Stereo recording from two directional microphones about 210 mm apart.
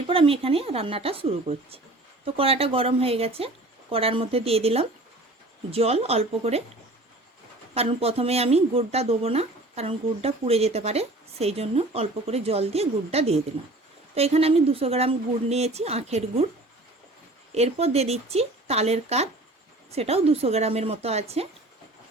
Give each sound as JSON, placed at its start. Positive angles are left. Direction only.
{"t": 0.1, "sound": "speech", "side_deg": -25}
{"t": 7.7, "sound": "speech", "side_deg": -30}
{"t": 17.5, "sound": "speech", "side_deg": -30}